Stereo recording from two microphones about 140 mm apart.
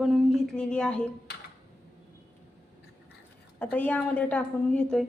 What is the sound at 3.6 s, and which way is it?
Speech, 10° left (ahead or behind).